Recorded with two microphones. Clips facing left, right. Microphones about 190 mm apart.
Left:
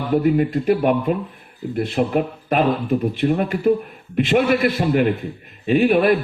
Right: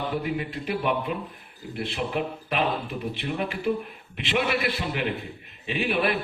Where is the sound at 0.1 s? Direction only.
45° left (ahead or behind).